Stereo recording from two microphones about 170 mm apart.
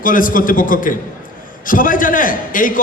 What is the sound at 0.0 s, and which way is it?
A man's voice, 55° left (ahead or behind).